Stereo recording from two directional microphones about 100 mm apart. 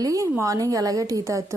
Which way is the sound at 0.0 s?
35° right (ahead or behind).